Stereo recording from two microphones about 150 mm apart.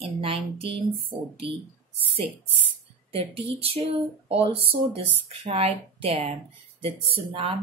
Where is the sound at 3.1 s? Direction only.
40° right (ahead or behind).